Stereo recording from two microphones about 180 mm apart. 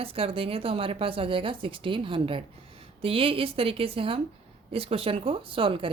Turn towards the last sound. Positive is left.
turn(degrees=-30)  # may be behind; listen again after turning